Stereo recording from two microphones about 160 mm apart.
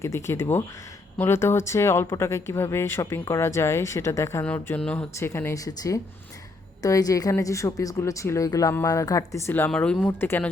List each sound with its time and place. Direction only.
0.0 s a woman's voice: 15° left (ahead or behind)